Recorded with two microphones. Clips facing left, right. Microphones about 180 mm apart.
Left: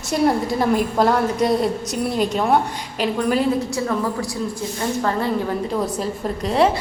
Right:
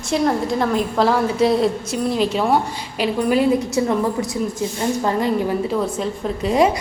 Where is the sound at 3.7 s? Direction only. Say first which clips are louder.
Right 3 dB; 20° right (ahead or behind).